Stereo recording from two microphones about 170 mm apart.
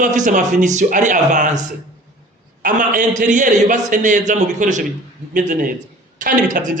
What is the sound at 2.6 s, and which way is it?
Speech, 55° right (ahead or behind).